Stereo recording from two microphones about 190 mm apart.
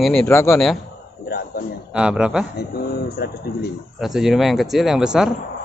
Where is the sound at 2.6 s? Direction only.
55° left (ahead or behind).